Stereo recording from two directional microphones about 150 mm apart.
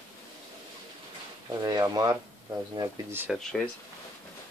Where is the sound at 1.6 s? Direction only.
25° right (ahead or behind).